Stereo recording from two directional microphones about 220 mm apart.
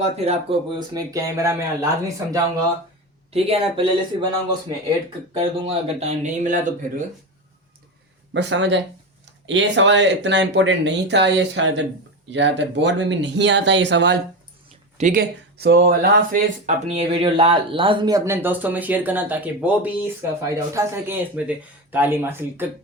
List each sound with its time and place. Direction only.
0.0 s speech: 25° right (ahead or behind)
3.3 s speech: 25° right (ahead or behind)
5.4 s speech: 30° right (ahead or behind)
8.3 s speech: 55° right (ahead or behind)
14.9 s speech: 35° right (ahead or behind); by 22.6 s 10° right (ahead or behind)